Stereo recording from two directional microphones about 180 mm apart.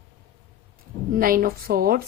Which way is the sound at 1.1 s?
50° right (ahead or behind).